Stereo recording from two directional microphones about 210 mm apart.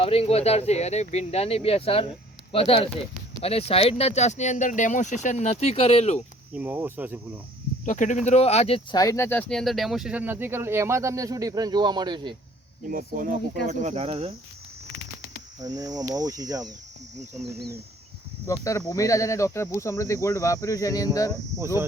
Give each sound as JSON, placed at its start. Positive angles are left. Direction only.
{"t": 0.0, "sound": "speech", "side_deg": 25}
{"t": 6.5, "sound": "speech", "side_deg": -10}
{"t": 7.9, "sound": "speech", "side_deg": 35}
{"t": 12.9, "sound": "speech", "side_deg": -40}
{"t": 15.6, "sound": "speech", "side_deg": -15}
{"t": 18.4, "sound": "speech", "side_deg": 15}